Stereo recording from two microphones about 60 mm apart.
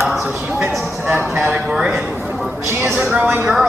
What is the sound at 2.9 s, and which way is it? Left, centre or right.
Speech, right.